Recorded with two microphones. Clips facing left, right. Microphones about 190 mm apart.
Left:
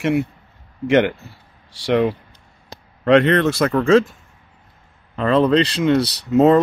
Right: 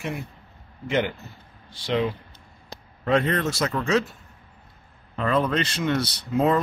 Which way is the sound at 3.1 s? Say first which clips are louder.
Left 8 dB; 80° left.